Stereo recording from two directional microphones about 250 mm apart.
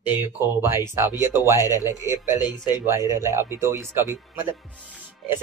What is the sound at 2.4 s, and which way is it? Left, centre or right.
Speech, centre.